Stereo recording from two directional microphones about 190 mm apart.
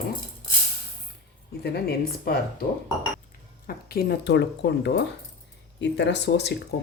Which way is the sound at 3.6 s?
55° left (ahead or behind).